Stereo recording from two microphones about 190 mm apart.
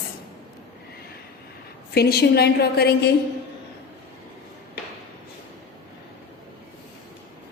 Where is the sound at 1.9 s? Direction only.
55° left (ahead or behind).